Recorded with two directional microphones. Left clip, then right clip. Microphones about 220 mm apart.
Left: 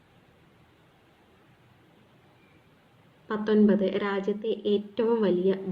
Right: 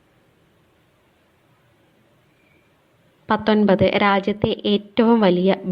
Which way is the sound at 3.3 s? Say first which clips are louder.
Right 7 dB; 40° right (ahead or behind).